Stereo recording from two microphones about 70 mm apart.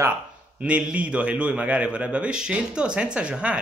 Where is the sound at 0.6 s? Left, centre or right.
Centre.